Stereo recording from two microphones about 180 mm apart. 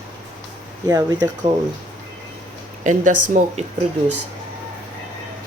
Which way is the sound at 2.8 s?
45° right (ahead or behind).